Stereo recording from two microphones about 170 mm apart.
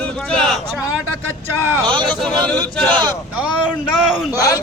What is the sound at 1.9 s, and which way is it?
A man's voice, 30° right (ahead or behind).